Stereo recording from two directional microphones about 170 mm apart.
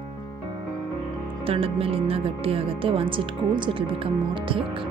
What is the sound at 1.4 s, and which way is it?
Speech, 35° right (ahead or behind).